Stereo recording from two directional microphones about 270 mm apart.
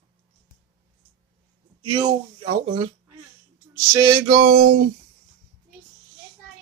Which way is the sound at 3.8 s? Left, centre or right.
Centre.